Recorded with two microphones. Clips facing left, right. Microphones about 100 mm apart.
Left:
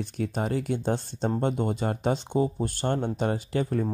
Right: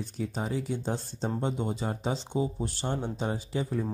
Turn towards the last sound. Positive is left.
turn(degrees=60)  # may be behind; listen again after turning